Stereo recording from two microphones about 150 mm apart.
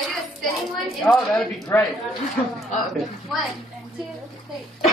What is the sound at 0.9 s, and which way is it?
Speech, 5° left (ahead or behind).